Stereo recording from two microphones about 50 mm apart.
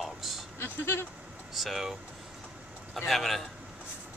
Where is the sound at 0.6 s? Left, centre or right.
Left.